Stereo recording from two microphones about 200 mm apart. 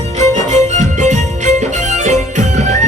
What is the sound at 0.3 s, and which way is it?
Music, 35° right (ahead or behind).